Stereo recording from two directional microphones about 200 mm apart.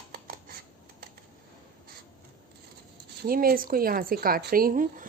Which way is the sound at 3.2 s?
45° right (ahead or behind).